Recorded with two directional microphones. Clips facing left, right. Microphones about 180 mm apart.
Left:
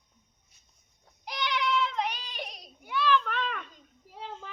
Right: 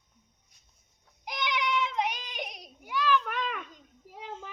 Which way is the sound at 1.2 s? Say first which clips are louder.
Left 1 dB; 15° right (ahead or behind).